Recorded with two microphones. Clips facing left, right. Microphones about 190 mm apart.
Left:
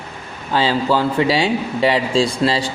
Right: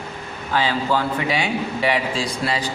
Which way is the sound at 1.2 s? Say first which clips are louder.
Left 5 dB; 30° left (ahead or behind).